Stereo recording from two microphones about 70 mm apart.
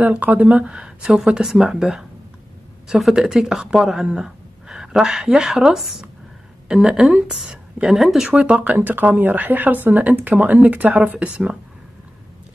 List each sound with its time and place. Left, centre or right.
0.0 s speech: right; by 8.3 s centre
8.3 s speech: centre